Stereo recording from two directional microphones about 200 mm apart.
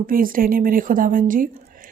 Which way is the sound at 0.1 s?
45° right (ahead or behind).